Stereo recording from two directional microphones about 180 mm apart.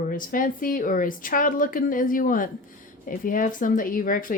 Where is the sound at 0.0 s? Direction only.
50° left (ahead or behind).